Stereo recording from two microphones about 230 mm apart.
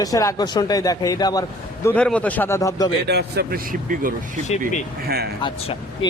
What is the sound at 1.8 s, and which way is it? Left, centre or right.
Speech, centre.